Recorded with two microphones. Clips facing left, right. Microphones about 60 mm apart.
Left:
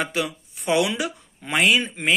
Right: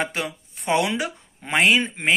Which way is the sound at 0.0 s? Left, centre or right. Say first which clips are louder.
Left 1 dB; right.